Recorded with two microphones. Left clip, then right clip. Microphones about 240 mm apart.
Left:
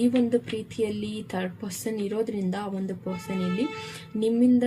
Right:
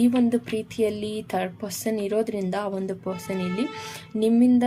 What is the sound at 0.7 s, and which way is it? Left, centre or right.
Speech, right.